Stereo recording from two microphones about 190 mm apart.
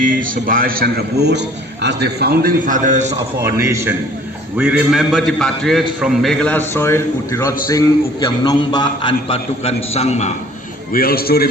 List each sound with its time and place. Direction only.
0.0 s a man's voice: 45° right (ahead or behind)
3.4 s a man's voice: 15° right (ahead or behind); by 10.3 s 35° left (ahead or behind)
10.9 s a man's voice: 50° left (ahead or behind)